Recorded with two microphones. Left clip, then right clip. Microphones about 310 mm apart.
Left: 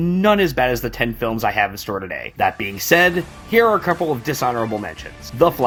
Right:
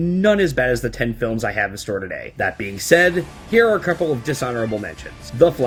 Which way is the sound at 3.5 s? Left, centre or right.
Left.